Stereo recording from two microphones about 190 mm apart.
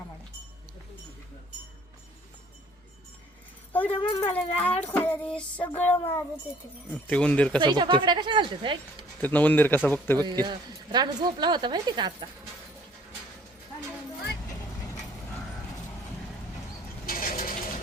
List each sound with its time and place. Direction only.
3.7 s dog: 10° left (ahead or behind)
3.9 s speech: 30° left (ahead or behind)
4.6 s child singing: 10° left (ahead or behind)
6.9 s speech: 5° left (ahead or behind)
7.6 s speech: 25° right (ahead or behind)
9.2 s child singing: 10° left (ahead or behind)
10.2 s speech: 20° right (ahead or behind)
17.1 s mechanisms: 50° left (ahead or behind)